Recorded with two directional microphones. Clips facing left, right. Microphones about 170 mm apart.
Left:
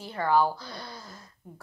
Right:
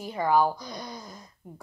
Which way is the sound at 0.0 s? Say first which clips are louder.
Right 1 dB; 15° right (ahead or behind).